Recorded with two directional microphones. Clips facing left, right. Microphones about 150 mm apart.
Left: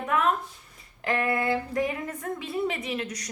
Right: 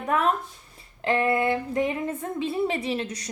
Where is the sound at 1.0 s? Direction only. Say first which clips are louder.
Right 3 dB; 25° right (ahead or behind).